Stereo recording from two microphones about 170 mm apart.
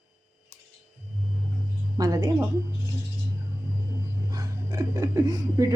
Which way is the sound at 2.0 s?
20° right (ahead or behind).